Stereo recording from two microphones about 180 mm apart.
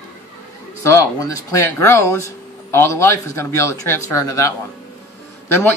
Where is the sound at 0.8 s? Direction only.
15° left (ahead or behind).